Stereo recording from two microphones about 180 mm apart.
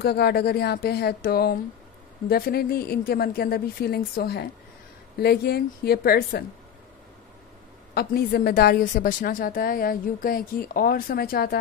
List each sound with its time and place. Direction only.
0.0 s a woman's voice: 60° left (ahead or behind)
7.9 s a woman's voice: 60° left (ahead or behind)